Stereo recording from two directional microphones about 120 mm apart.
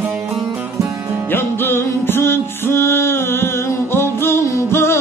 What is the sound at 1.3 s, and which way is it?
Music, 20° left (ahead or behind).